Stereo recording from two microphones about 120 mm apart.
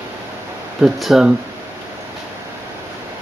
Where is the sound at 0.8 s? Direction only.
5° right (ahead or behind).